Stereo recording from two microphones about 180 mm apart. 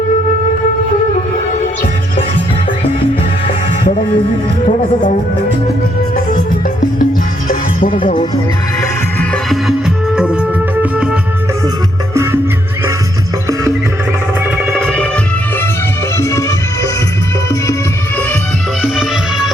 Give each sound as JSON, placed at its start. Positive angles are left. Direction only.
{"t": 7.0, "sound": "music", "side_deg": 50}
{"t": 9.3, "sound": "music", "side_deg": 0}
{"t": 12.1, "sound": "music", "side_deg": -15}
{"t": 14.7, "sound": "music", "side_deg": 5}
{"t": 16.1, "sound": "music", "side_deg": 15}
{"t": 18.8, "sound": "music", "side_deg": 0}